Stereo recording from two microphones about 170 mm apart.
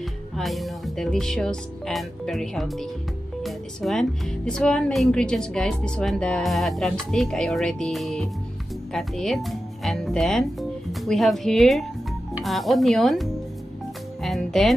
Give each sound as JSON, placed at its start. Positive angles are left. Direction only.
{"t": 0.4, "sound": "speech", "side_deg": 0}
{"t": 14.2, "sound": "music", "side_deg": 0}